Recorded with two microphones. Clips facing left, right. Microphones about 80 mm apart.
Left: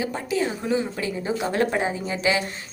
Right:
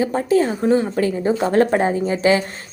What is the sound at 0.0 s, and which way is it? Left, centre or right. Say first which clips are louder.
A woman's voice: right 8 dB; right.